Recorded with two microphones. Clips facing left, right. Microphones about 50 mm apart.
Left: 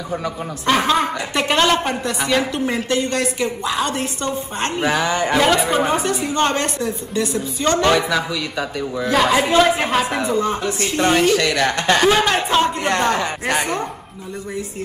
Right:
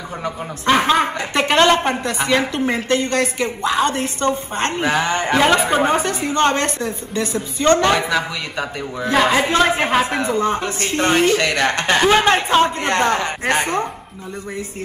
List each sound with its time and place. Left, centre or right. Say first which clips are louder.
0.2 s a man's voice: even; right